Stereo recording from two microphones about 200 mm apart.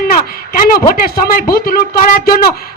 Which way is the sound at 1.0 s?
45° left (ahead or behind).